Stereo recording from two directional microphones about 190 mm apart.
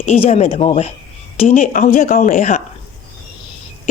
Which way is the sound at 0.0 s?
35° left (ahead or behind).